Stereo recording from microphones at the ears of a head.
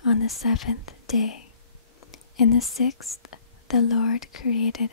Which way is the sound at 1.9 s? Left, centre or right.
Left.